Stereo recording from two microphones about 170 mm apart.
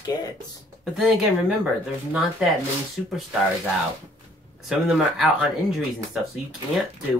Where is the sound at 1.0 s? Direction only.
5° right (ahead or behind).